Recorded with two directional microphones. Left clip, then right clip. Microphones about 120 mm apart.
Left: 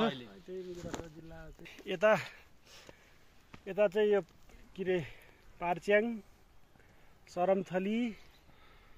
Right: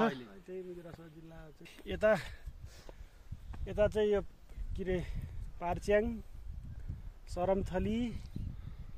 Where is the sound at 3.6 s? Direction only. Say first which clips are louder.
Left 2 dB; 60° left (ahead or behind).